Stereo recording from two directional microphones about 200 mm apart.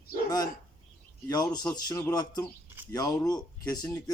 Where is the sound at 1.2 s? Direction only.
20° left (ahead or behind).